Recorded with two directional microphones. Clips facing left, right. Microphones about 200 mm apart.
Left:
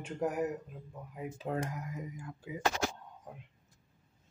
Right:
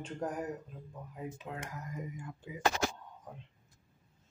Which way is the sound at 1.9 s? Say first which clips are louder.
Even; centre (ahead or behind).